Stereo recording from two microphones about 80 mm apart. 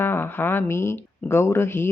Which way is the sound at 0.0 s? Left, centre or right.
Left.